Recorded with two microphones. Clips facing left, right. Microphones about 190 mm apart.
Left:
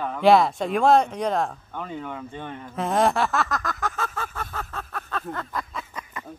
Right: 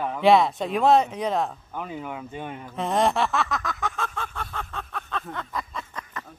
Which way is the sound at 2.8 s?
Centre (ahead or behind).